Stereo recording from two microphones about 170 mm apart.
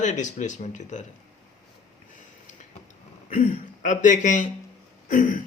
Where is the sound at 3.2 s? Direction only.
45° left (ahead or behind).